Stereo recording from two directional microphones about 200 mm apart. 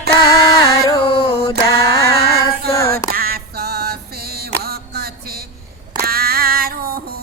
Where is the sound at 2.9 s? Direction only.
50° right (ahead or behind).